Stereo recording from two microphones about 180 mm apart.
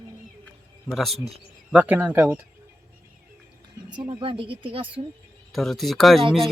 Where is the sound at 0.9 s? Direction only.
Centre (ahead or behind).